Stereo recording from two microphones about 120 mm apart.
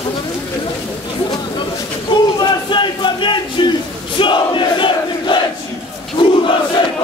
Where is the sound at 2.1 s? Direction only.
40° left (ahead or behind).